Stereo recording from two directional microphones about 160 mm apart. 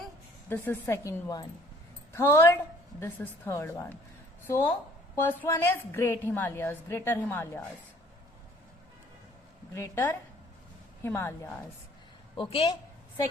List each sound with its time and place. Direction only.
0.4 s a woman's voice: 10° left (ahead or behind)
5.1 s a woman's voice: 15° left (ahead or behind)
9.7 s a woman's voice: 15° left (ahead or behind)
12.4 s speech: 40° left (ahead or behind)